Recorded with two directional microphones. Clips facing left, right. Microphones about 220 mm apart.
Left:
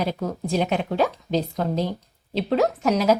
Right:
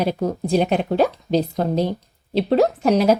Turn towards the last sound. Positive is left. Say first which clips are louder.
# right 3 dB
turn(degrees=-30)  # may be behind; listen again after turning